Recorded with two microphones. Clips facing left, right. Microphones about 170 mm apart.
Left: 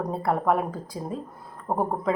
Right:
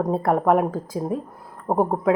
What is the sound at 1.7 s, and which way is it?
Speech, 40° right (ahead or behind).